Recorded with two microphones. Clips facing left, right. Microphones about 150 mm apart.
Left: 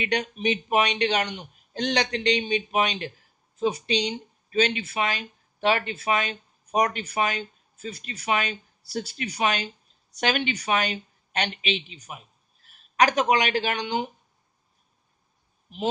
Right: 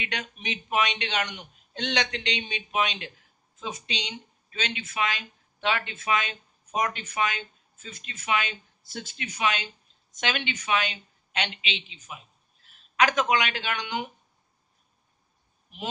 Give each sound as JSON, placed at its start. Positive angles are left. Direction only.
{"t": 0.0, "sound": "a man's voice", "side_deg": 35}